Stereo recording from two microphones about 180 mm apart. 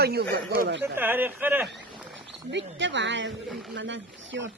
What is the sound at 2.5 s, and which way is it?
Speech, 90° right.